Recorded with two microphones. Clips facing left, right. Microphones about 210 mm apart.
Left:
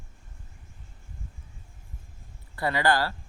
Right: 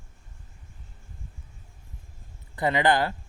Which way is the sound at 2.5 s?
20° right (ahead or behind).